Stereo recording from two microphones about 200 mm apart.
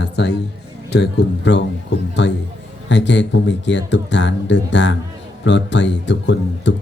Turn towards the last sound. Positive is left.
turn(degrees=65)  # may be behind; listen again after turning